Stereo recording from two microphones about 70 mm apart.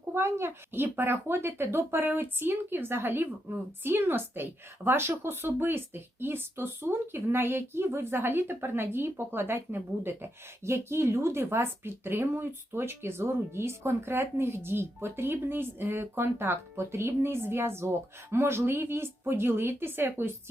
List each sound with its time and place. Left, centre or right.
0.1 s speech: right